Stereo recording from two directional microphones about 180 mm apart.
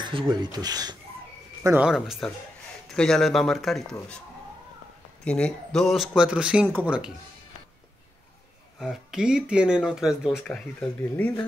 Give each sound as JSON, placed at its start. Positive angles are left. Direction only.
{"t": 0.0, "sound": "speech", "side_deg": -25}
{"t": 1.6, "sound": "speech", "side_deg": -10}
{"t": 5.2, "sound": "speech", "side_deg": 5}
{"t": 8.7, "sound": "speech", "side_deg": -5}